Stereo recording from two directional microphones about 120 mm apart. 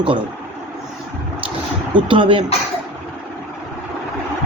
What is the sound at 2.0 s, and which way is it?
Speech, 45° right (ahead or behind).